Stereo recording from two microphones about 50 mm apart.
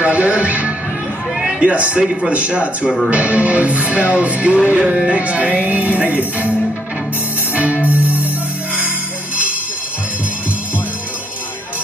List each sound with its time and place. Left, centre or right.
0.0 s music: right
1.4 s a man's voice: right
2.0 s music: right
7.5 s music: right